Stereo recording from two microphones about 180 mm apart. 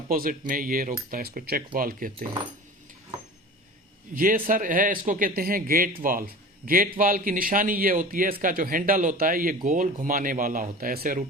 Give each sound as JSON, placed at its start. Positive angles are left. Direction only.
{"t": 0.1, "sound": "a man's voice", "side_deg": -50}
{"t": 4.1, "sound": "a man's voice", "side_deg": -50}